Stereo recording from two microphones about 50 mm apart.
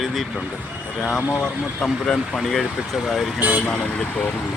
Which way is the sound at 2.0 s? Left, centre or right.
Centre.